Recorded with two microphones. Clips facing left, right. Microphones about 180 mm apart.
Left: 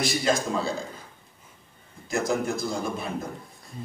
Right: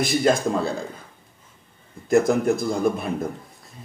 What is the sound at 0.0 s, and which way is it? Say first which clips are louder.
Speech: right 5 dB; 55° right (ahead or behind).